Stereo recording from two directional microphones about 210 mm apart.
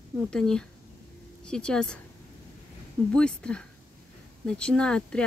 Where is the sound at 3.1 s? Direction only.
5° left (ahead or behind).